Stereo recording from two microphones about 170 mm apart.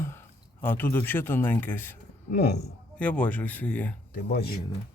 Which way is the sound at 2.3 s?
70° left (ahead or behind).